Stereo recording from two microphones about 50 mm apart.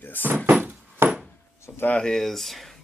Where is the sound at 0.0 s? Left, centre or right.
Left.